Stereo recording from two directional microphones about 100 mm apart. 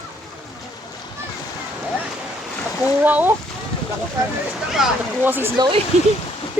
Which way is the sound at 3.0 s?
15° right (ahead or behind).